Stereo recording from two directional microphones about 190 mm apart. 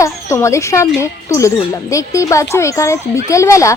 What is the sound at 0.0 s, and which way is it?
Speech, 15° left (ahead or behind).